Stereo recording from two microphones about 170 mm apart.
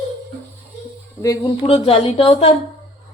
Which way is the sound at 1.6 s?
35° left (ahead or behind).